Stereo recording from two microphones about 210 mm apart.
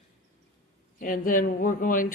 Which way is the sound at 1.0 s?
40° left (ahead or behind).